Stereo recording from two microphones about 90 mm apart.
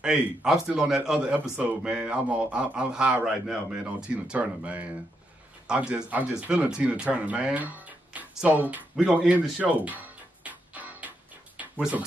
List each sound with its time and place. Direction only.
0.0 s a man's voice: 10° right (ahead or behind)
4.1 s a man's voice: 15° right (ahead or behind)
9.3 s music: 15° right (ahead or behind)